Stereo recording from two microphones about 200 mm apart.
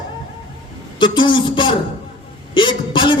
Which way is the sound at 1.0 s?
25° left (ahead or behind).